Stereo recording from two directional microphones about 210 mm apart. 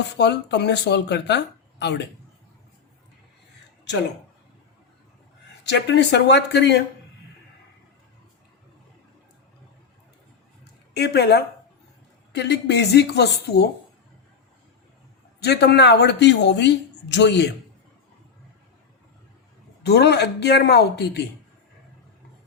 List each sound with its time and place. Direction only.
0.2 s speech: 55° left (ahead or behind)
5.6 s speech: 55° left (ahead or behind)
10.9 s speech: 50° left (ahead or behind)
15.4 s speech: 50° left (ahead or behind)
19.8 s speech: 50° left (ahead or behind)